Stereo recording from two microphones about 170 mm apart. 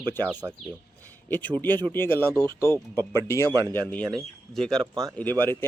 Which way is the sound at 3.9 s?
5° left (ahead or behind).